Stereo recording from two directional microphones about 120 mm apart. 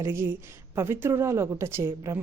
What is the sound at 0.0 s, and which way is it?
Speech, 20° right (ahead or behind).